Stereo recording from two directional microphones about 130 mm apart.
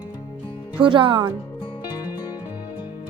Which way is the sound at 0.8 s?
40° right (ahead or behind).